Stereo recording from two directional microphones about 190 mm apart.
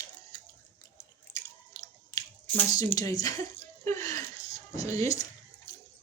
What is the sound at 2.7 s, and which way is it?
Speech, 20° left (ahead or behind).